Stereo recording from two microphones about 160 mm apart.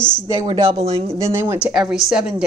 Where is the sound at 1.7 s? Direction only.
5° right (ahead or behind).